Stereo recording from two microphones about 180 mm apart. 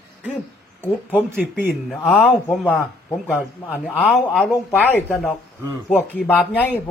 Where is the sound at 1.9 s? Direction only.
10° left (ahead or behind).